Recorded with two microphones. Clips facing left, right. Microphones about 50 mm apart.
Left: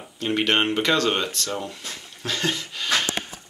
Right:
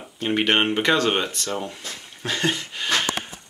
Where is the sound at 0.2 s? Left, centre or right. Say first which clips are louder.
Right 1 dB; centre.